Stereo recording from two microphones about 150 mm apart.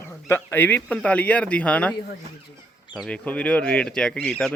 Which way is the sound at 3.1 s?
10° left (ahead or behind).